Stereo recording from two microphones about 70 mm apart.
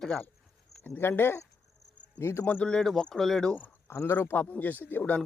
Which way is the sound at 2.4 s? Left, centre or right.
Left.